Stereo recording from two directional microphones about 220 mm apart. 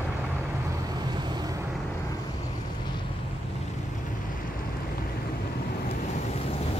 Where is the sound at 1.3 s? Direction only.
20° right (ahead or behind).